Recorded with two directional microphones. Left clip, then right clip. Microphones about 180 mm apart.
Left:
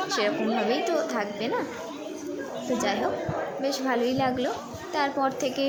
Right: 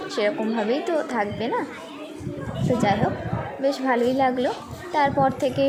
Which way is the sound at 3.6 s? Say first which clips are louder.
Right 6 dB; 10° right (ahead or behind).